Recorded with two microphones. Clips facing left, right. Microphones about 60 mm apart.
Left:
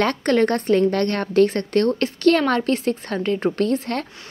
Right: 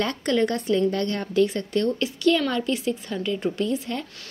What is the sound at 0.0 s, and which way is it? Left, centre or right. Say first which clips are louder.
A woman's voice: left 5 dB; left.